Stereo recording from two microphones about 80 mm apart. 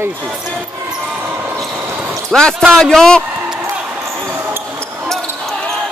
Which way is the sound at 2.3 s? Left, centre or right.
Centre.